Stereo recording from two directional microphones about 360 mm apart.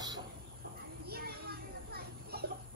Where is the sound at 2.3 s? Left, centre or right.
Right.